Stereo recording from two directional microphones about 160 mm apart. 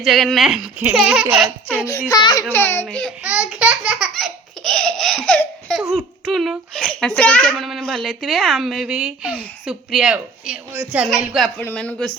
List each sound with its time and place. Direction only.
0.0 s speech: centre (ahead or behind)
1.9 s a child's voice: 25° left (ahead or behind)
2.5 s speech: 15° left (ahead or behind)
3.2 s laughter: 5° right (ahead or behind)
5.9 s speech: centre (ahead or behind)